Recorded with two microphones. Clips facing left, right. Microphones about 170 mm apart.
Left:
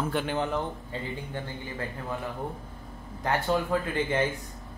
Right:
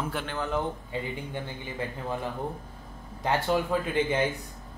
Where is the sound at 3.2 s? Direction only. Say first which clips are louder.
Right 1 dB; 15° right (ahead or behind).